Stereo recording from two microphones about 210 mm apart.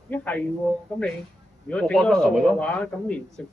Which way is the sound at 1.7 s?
5° left (ahead or behind).